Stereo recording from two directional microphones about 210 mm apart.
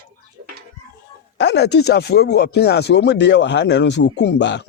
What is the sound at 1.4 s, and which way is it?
Speech, 55° left (ahead or behind).